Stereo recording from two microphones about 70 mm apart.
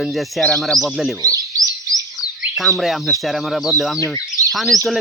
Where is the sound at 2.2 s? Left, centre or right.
Centre.